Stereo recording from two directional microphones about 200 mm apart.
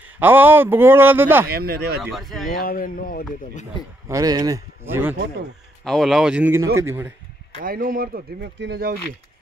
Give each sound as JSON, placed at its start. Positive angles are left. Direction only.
{"t": 0.2, "sound": "speech", "side_deg": -10}
{"t": 1.5, "sound": "speech", "side_deg": -50}
{"t": 2.0, "sound": "speech", "side_deg": 0}
{"t": 2.6, "sound": "speech", "side_deg": 45}
{"t": 4.1, "sound": "speech", "side_deg": -20}
{"t": 5.9, "sound": "speech", "side_deg": 0}
{"t": 7.6, "sound": "speech", "side_deg": -45}